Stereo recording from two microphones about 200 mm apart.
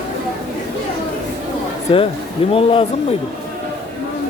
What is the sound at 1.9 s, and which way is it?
Speech, 25° left (ahead or behind).